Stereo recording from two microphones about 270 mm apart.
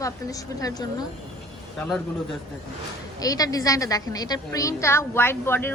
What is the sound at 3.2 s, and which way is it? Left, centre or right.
A woman's voice, centre.